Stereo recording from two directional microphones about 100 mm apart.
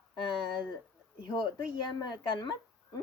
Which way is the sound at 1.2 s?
50° left (ahead or behind).